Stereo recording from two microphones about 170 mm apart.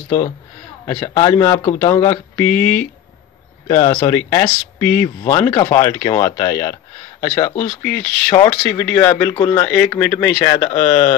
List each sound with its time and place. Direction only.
0.8 s speech: 10° left (ahead or behind)
7.2 s speech: 35° left (ahead or behind)
7.8 s speech: 10° left (ahead or behind)
9.3 s speech: 25° left (ahead or behind)
9.6 s speech: 10° left (ahead or behind)